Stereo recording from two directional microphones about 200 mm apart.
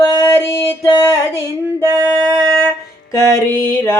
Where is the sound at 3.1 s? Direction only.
15° left (ahead or behind).